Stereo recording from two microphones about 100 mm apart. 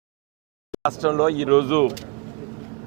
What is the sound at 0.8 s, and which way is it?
A man's voice, 25° right (ahead or behind).